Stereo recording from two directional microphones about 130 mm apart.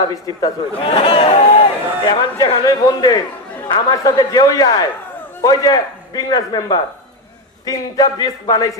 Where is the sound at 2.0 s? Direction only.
30° left (ahead or behind).